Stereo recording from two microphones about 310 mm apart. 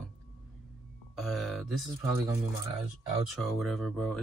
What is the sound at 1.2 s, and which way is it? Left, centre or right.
Speech, centre.